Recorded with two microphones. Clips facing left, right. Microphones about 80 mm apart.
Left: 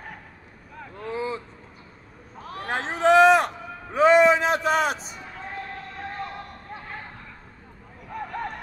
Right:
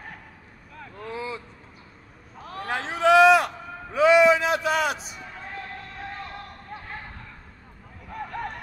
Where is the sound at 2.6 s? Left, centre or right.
Left.